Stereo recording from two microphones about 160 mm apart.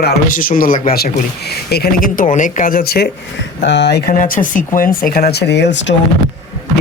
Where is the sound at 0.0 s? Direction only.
60° left (ahead or behind); by 3.1 s 80° left.